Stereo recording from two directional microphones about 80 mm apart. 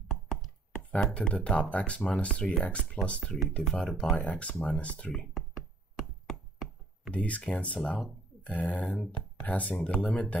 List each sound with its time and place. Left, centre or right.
0.1 s chopping: centre
0.9 s speech: centre
4.2 s speech: centre
5.9 s chop: centre
7.1 s speech: centre
8.8 s speech: centre
9.4 s speech: centre